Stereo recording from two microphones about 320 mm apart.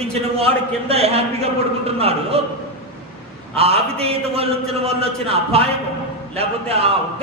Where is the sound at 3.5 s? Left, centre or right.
Centre.